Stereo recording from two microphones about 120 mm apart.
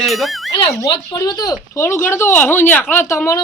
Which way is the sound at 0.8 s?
30° left (ahead or behind).